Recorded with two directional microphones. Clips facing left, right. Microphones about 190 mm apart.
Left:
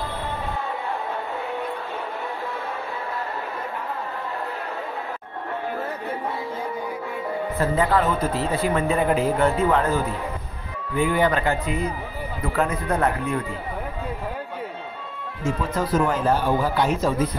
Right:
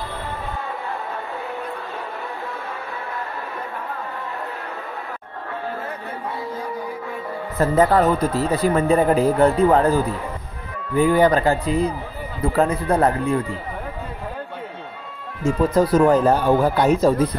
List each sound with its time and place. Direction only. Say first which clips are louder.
7.5 s speech: right 5 dB; 40° right (ahead or behind)
15.7 s speech: right 8 dB; 35° right (ahead or behind)